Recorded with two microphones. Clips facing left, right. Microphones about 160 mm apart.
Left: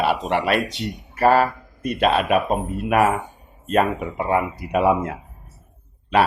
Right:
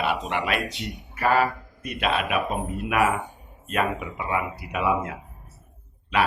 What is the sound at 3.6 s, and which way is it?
Speech, 35° left (ahead or behind).